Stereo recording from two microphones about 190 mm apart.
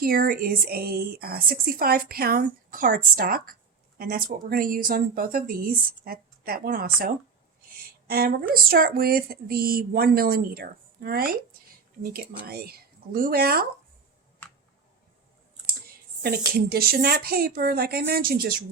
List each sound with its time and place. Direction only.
0.0 s speech: 50° right (ahead or behind)
16.6 s speech: 55° right (ahead or behind)